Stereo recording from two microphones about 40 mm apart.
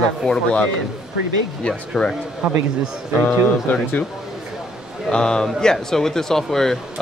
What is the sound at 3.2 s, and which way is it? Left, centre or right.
Speech, left.